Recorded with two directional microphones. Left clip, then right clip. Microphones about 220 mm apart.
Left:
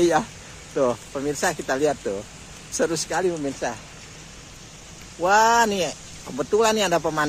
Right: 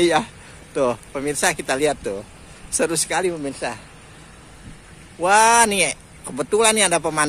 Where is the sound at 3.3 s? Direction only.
5° right (ahead or behind).